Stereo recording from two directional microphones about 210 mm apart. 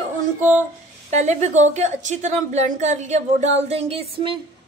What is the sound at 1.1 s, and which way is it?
A woman's voice, 35° right (ahead or behind).